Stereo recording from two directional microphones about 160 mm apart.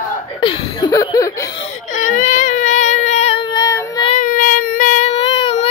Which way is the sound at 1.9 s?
55° left (ahead or behind).